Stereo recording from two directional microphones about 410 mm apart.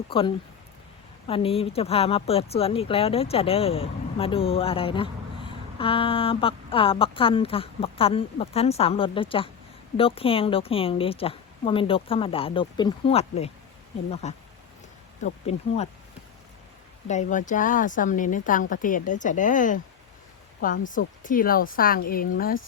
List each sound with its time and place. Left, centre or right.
0.1 s speech: centre
17.1 s a woman's voice: centre